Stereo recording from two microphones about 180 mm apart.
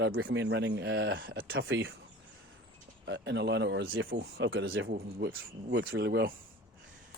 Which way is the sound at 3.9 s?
90° right.